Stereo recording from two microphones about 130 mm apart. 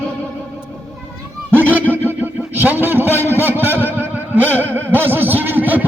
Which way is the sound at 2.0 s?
15° right (ahead or behind).